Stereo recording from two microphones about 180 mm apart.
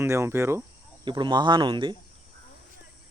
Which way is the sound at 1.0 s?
25° right (ahead or behind).